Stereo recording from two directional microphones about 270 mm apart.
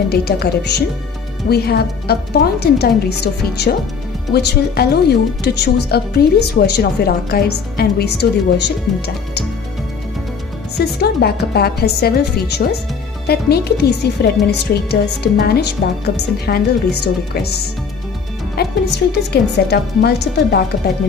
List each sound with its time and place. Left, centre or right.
0.1 s speech: left
11.0 s speech: left
18.6 s speech: left